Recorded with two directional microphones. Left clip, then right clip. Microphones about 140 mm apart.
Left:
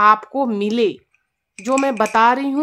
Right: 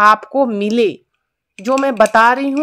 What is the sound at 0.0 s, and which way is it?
A woman's voice, 30° right (ahead or behind).